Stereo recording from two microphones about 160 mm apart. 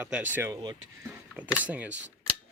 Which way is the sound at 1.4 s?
10° right (ahead or behind).